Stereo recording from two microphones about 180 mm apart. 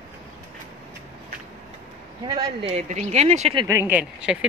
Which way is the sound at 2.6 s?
40° right (ahead or behind).